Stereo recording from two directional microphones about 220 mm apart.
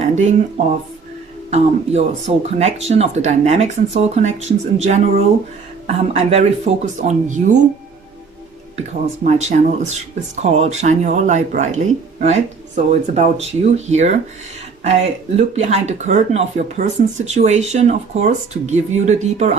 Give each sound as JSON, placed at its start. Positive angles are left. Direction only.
{"t": 0.0, "sound": "speech", "side_deg": -30}
{"t": 9.2, "sound": "speech", "side_deg": -35}
{"t": 15.4, "sound": "speech", "side_deg": -30}